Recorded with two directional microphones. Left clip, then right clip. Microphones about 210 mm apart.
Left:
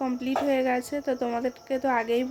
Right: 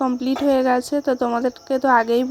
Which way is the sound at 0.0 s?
35° right (ahead or behind).